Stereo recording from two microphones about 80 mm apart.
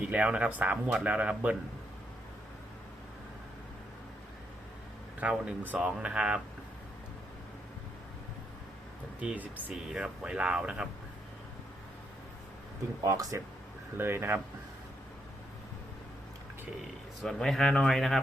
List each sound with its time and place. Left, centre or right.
0.0 s speech: centre
5.2 s speech: centre
9.2 s speech: centre
9.7 s speech: centre
13.1 s speech: right
13.9 s speech: right
17.2 s speech: centre